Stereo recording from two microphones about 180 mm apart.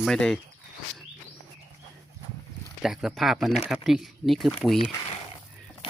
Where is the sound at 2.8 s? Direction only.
5° right (ahead or behind).